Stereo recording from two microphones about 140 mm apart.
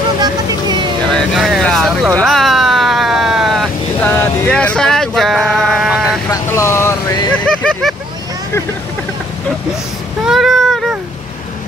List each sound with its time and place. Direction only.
1.1 s speech: centre (ahead or behind)
2.1 s vehicle: centre (ahead or behind)
4.0 s vehicle: 15° left (ahead or behind); by 6.1 s 5° right (ahead or behind)
6.3 s vehicle: 20° left (ahead or behind)
7.4 s vehicle: 5° left (ahead or behind)
10.2 s a sound: centre (ahead or behind)